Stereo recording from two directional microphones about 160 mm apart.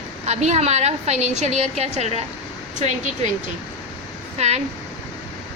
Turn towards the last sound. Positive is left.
turn(degrees=-40)  # may be behind; listen again after turning